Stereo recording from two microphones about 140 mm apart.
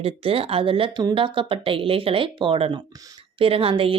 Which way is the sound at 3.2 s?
40° right (ahead or behind).